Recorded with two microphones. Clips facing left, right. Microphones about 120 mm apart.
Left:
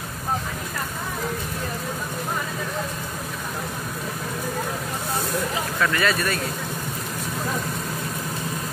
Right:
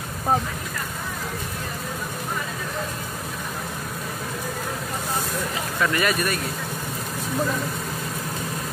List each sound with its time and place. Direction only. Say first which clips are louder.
5.8 s speech: right 1 dB; 20° right (ahead or behind)